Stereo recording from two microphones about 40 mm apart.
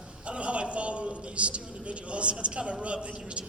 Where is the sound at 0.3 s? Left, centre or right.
Right.